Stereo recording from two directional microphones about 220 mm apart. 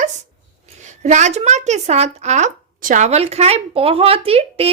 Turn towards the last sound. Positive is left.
turn(degrees=-25)  # may be behind; listen again after turning